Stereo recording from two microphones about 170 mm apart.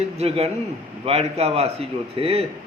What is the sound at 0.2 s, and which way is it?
A man's voice, 35° right (ahead or behind).